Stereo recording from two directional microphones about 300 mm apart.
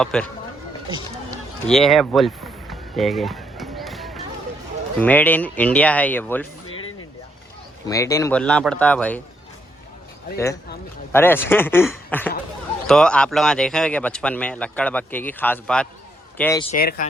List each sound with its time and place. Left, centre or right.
0.0 s speech: centre
1.6 s a sound: centre
4.9 s speech: centre
7.9 s speech: centre
10.3 s speech: centre
16.6 s speech: left